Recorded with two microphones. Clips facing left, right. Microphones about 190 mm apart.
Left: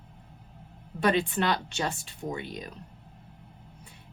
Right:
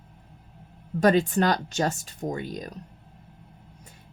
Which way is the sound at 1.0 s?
40° right (ahead or behind).